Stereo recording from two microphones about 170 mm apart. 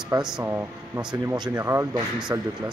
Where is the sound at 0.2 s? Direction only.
5° right (ahead or behind).